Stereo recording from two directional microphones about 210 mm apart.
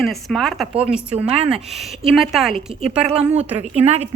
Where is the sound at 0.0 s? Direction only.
Centre (ahead or behind).